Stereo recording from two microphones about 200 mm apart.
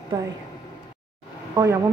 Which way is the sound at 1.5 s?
15° right (ahead or behind).